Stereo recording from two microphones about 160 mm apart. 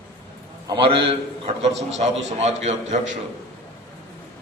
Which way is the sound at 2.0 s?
45° right (ahead or behind).